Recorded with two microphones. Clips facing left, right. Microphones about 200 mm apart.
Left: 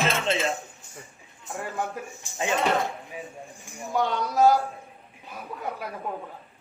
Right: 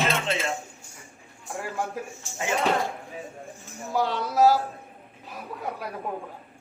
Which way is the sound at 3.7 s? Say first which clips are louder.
Left 1 dB; 15° left (ahead or behind).